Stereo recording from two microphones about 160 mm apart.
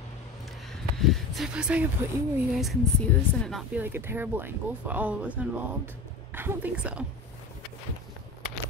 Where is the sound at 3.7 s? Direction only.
15° right (ahead or behind).